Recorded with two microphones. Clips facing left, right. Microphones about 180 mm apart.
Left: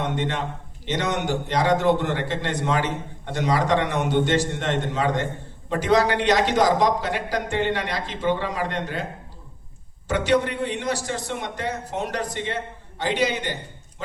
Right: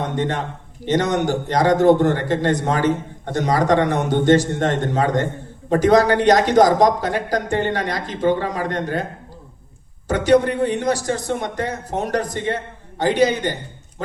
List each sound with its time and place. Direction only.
0.0 s a man's voice: 40° right (ahead or behind)
10.1 s a man's voice: 40° right (ahead or behind)